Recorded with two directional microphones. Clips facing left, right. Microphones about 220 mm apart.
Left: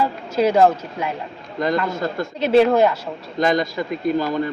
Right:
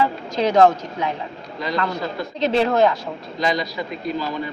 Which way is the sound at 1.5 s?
50° left (ahead or behind).